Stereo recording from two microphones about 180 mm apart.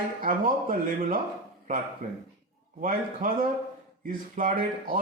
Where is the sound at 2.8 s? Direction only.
50° right (ahead or behind).